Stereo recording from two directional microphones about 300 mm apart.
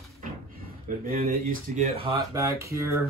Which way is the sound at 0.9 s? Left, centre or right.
Right.